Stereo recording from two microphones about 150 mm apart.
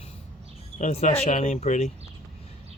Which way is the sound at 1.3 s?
60° left (ahead or behind).